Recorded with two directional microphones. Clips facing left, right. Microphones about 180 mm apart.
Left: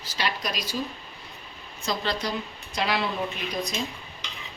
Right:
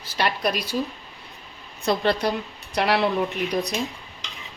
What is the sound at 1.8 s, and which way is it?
A woman's voice, 60° right (ahead or behind).